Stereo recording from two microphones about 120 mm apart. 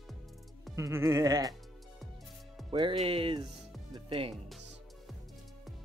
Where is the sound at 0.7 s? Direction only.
25° right (ahead or behind).